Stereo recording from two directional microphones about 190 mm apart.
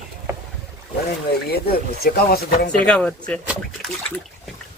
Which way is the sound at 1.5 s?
55° left (ahead or behind).